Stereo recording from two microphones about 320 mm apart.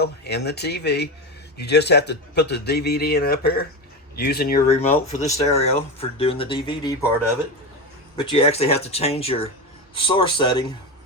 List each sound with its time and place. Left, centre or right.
0.0 s speech: left; by 7.1 s centre
8.1 s speech: centre